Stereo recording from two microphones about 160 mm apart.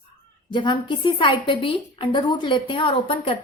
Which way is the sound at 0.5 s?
30° left (ahead or behind).